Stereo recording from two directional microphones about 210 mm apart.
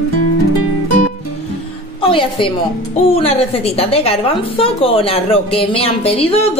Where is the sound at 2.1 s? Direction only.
25° left (ahead or behind).